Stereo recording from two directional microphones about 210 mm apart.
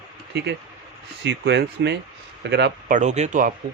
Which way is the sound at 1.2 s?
55° right (ahead or behind).